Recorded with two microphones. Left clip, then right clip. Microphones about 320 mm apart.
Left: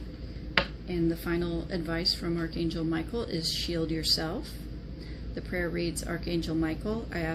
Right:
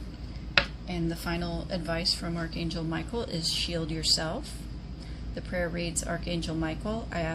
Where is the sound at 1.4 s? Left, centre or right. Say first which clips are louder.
Left 2 dB; right.